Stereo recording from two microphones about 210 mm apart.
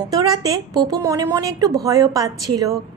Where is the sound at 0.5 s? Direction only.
15° right (ahead or behind).